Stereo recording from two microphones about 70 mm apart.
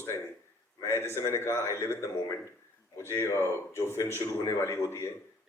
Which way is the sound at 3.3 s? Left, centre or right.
Left.